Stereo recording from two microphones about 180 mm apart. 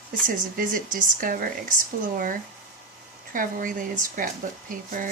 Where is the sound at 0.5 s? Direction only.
50° right (ahead or behind).